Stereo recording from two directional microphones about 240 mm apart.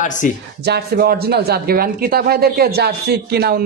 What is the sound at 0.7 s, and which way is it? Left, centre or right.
Speech, right.